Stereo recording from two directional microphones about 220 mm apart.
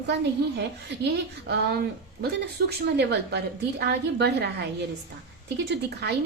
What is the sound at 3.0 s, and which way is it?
A woman's voice, 50° right (ahead or behind).